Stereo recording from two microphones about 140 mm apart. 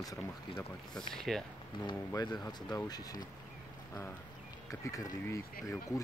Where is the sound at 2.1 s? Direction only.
25° left (ahead or behind).